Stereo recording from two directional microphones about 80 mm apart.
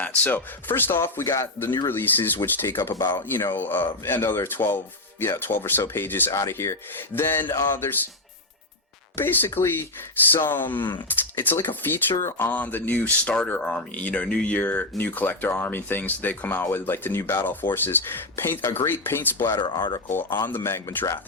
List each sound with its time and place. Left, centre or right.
0.0 s speech: left
9.1 s speech: left
10.8 s speech: left
11.3 s speech: left
19.5 s speech: left
20.1 s speech: left